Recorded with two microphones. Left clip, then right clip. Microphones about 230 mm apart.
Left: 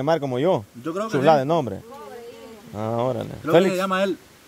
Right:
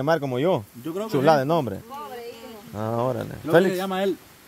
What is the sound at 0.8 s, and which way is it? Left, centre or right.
Speech, centre.